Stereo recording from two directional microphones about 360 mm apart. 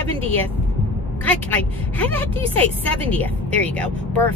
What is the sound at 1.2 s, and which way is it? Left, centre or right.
Speech, centre.